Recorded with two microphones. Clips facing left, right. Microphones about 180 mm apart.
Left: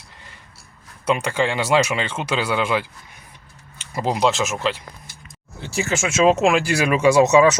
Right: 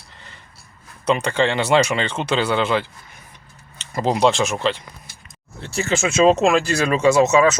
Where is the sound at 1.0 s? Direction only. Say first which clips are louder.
Right 2 dB; 10° left (ahead or behind).